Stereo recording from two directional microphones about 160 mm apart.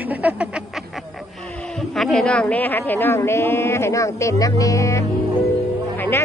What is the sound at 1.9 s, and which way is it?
Speech, centre (ahead or behind).